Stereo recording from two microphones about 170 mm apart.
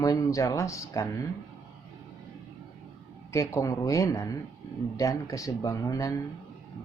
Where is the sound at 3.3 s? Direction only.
15° left (ahead or behind).